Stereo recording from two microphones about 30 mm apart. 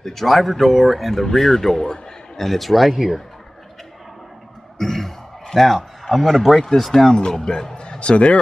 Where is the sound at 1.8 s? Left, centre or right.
Centre.